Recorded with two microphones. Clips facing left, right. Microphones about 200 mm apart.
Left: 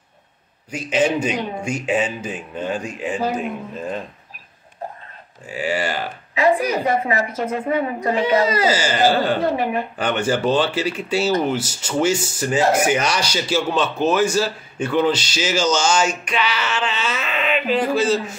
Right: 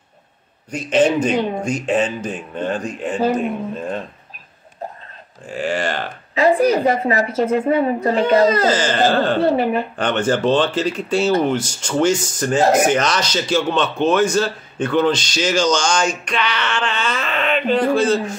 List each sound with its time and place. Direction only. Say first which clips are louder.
0.7 s speech: right 4 dB; 10° left (ahead or behind)
5.5 s speech: right 1 dB; 5° left (ahead or behind)
6.3 s a woman's voice: right 4 dB; 35° right (ahead or behind)
8.5 s speech: right 3 dB; 10° left (ahead or behind)
9.4 s a woman's voice: right 4 dB; 30° right (ahead or behind)
9.9 s speech: right 2 dB; 10° left (ahead or behind)